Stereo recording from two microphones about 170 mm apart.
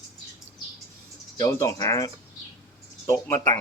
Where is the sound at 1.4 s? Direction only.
20° left (ahead or behind).